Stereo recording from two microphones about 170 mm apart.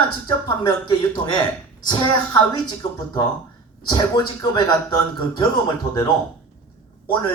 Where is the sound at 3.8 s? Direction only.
25° left (ahead or behind).